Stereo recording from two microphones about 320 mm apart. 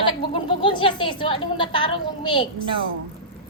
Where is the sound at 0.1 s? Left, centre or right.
Centre.